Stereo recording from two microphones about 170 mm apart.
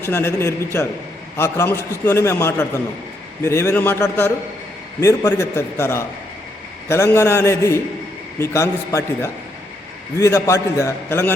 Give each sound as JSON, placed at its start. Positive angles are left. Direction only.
{"t": 0.0, "sound": "a man's voice", "side_deg": 15}